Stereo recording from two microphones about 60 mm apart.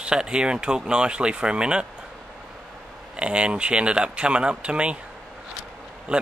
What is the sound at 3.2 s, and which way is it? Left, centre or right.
Speech, centre.